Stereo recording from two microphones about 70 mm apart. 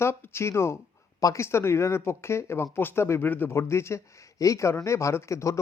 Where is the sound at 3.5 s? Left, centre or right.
Left.